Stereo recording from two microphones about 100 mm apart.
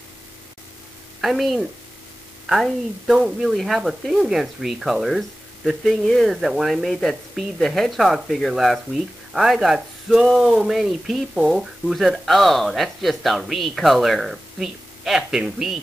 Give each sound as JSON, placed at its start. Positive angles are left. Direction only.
{"t": 1.2, "sound": "speech", "side_deg": 0}